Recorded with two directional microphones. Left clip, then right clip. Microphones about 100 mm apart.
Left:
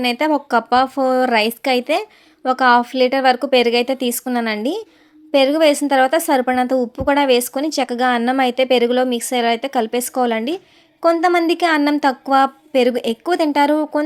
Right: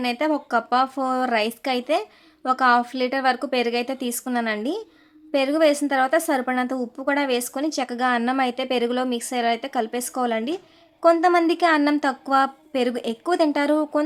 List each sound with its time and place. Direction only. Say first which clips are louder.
0.0 s speech: left 6 dB; 45° left (ahead or behind); by 14.0 s 30° left (ahead or behind)